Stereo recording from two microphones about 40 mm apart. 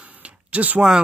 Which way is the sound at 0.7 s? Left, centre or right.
Centre.